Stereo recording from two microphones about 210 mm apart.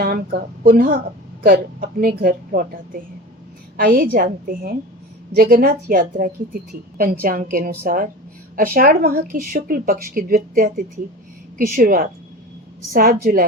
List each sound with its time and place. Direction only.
0.0 s speech: 45° right (ahead or behind)